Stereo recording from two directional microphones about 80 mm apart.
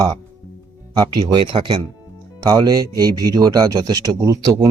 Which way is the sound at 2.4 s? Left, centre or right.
Right.